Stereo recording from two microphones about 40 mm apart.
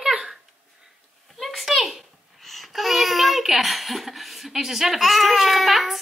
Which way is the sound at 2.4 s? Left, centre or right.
Centre.